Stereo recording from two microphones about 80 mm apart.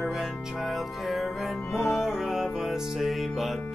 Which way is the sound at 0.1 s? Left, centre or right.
Centre.